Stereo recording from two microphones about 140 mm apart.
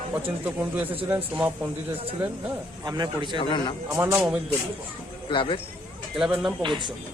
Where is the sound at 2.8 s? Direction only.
30° right (ahead or behind).